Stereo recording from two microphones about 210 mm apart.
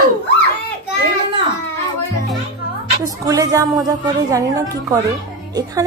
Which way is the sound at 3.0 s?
15° right (ahead or behind).